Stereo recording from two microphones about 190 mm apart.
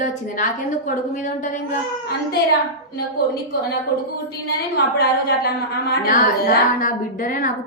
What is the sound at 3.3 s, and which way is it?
Speech, 55° left (ahead or behind).